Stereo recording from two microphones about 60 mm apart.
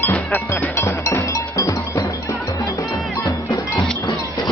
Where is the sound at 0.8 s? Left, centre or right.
Left.